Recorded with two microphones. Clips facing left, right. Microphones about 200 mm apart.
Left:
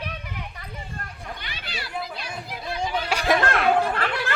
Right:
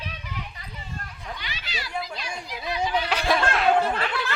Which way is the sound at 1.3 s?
55° left (ahead or behind).